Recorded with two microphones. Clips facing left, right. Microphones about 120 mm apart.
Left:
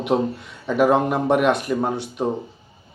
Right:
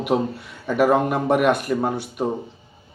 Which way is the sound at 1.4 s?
55° right (ahead or behind).